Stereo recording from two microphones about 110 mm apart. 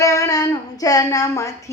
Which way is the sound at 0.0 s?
30° left (ahead or behind).